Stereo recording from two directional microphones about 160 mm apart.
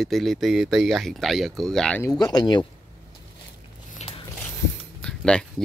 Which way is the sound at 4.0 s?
35° left (ahead or behind).